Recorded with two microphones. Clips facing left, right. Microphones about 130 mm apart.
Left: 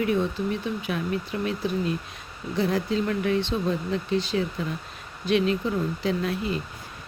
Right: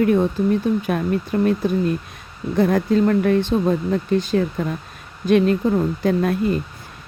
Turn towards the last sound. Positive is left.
turn(degrees=-50)  # may be behind; listen again after turning